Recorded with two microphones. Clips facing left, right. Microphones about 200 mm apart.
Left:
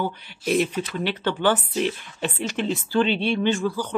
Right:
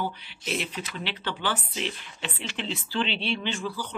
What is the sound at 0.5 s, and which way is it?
Speech, 45° left (ahead or behind).